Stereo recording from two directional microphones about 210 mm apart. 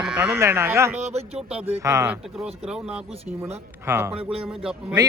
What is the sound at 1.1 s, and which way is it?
Speech, 30° right (ahead or behind).